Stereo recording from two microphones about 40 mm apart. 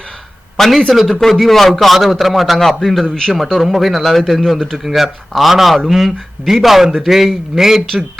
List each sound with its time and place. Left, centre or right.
0.5 s speech: centre